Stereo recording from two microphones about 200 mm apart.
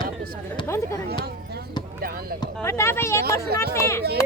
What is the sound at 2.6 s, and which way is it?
Speech, 15° left (ahead or behind).